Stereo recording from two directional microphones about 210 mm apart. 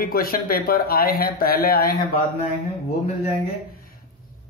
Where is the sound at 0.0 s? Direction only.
45° left (ahead or behind).